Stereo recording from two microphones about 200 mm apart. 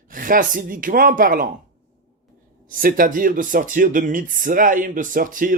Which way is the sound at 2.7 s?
45° right (ahead or behind).